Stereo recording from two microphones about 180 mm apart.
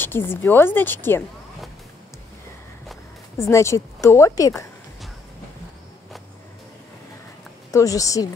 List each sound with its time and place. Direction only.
0.0 s a woman's voice: 10° left (ahead or behind)
3.3 s a woman's voice: 15° left (ahead or behind)
7.7 s a woman's voice: 20° left (ahead or behind)